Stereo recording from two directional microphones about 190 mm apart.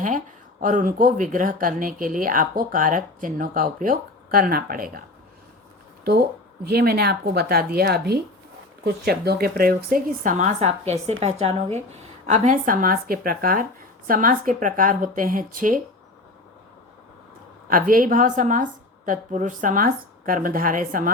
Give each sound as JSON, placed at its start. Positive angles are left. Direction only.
{"t": 0.6, "sound": "speech", "side_deg": -45}
{"t": 6.7, "sound": "speech", "side_deg": -55}
{"t": 17.7, "sound": "speech", "side_deg": -45}